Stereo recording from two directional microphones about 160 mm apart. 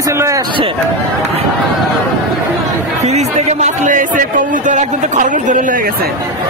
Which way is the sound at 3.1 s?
50° right (ahead or behind).